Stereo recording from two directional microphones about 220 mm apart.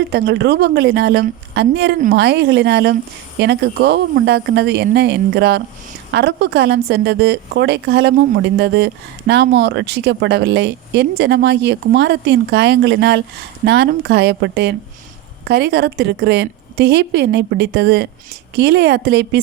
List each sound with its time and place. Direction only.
0.1 s a woman's voice: 50° right (ahead or behind)